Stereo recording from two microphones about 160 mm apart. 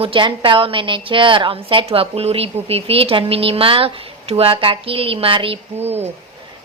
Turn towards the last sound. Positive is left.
turn(degrees=-40)  # may be behind; listen again after turning